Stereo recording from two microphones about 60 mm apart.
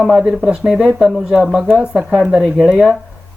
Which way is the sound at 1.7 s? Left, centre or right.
Centre.